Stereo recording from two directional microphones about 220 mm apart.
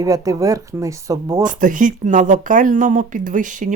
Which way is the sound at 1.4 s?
35° right (ahead or behind).